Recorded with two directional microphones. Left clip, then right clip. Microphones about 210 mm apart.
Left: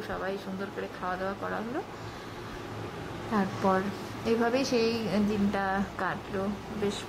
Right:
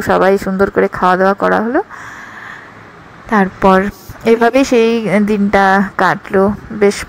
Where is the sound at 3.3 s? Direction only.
40° right (ahead or behind).